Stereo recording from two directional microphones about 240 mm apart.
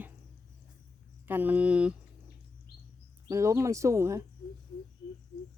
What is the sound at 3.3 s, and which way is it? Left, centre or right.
Speech, centre.